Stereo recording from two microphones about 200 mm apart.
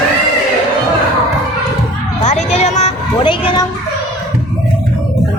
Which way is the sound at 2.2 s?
35° left (ahead or behind).